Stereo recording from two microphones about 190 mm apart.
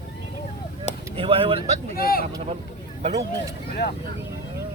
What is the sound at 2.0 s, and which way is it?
Speech, 50° left (ahead or behind).